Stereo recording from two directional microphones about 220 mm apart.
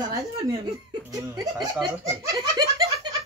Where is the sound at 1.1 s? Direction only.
15° right (ahead or behind).